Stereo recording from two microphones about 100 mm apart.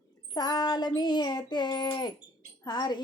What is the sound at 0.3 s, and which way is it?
Music, 45° left (ahead or behind).